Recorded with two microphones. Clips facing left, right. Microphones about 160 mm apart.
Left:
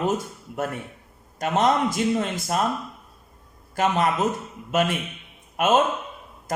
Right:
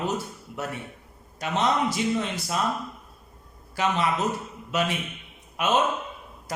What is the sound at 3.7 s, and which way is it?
A man's voice, 50° left (ahead or behind).